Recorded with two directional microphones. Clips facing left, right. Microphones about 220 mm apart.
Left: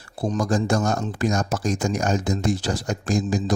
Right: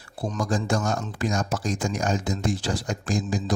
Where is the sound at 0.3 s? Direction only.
40° left (ahead or behind).